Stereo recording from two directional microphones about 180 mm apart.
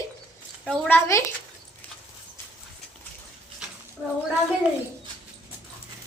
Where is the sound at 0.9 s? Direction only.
15° left (ahead or behind).